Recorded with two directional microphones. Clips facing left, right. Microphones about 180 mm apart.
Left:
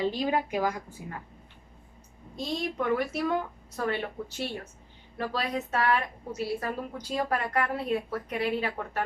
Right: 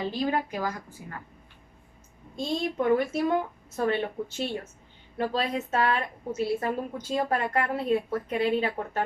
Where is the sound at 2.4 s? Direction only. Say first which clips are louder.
Right 3 dB; 25° right (ahead or behind).